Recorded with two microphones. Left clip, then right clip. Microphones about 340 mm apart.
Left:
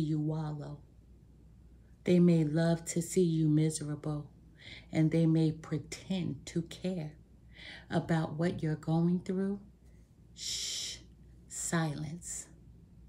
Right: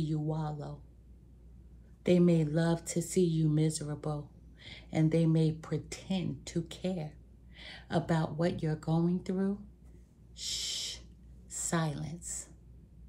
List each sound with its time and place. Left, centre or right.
0.0 s a sound: centre
2.0 s speech: centre
10.3 s snort: centre
11.5 s a woman's voice: centre